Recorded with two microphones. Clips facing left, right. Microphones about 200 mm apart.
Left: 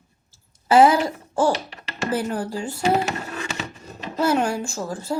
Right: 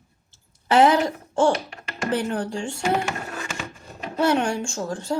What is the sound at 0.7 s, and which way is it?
A child's voice, 5° left (ahead or behind).